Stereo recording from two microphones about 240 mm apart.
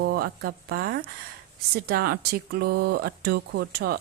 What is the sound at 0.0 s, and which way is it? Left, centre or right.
Speech, right.